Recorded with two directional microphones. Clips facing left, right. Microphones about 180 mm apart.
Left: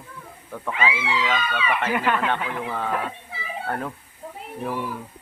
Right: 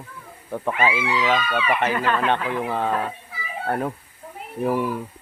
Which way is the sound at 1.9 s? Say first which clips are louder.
Even; 10° left (ahead or behind).